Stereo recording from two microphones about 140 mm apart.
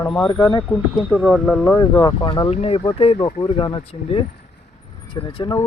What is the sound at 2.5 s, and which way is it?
Speech, 50° left (ahead or behind).